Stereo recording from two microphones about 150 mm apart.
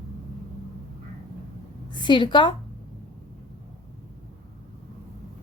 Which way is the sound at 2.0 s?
30° left (ahead or behind).